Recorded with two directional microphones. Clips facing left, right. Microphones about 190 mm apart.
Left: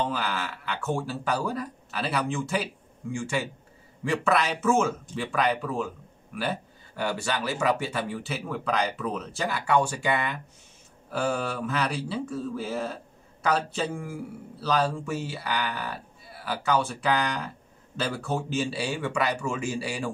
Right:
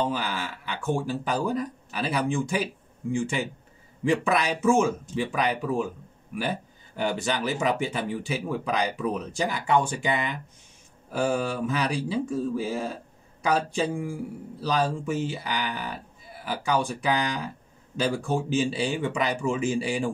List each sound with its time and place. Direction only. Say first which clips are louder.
0.1 s speech: even; 15° right (ahead or behind)
7.0 s speech: right 2 dB; 20° right (ahead or behind)